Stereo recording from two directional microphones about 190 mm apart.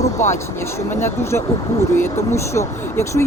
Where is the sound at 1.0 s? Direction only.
15° left (ahead or behind).